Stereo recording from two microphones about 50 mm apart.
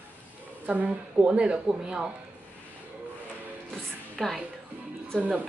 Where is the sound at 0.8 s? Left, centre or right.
Right.